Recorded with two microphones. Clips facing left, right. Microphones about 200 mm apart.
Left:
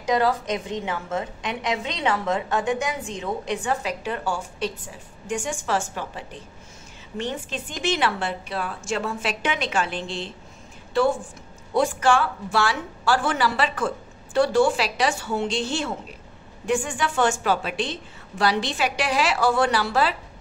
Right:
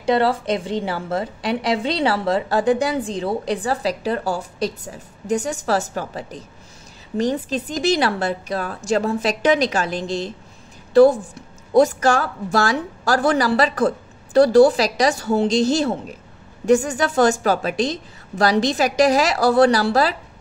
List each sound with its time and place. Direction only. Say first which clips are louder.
0.0 s a woman's voice: right 4 dB; 30° right (ahead or behind)